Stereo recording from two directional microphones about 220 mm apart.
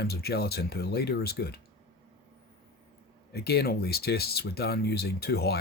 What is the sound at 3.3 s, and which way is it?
Speech, 45° left (ahead or behind).